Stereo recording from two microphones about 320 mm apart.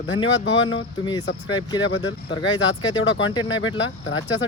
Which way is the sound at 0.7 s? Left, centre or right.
Centre.